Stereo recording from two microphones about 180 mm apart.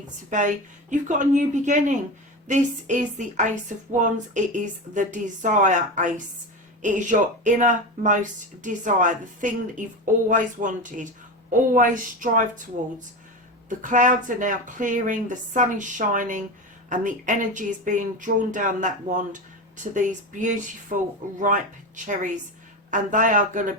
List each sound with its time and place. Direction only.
0.3 s speech: 45° right (ahead or behind)
13.7 s speech: 45° right (ahead or behind)